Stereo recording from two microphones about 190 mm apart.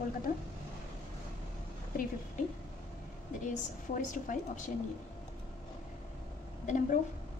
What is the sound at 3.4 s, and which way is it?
A woman's voice, 40° left (ahead or behind).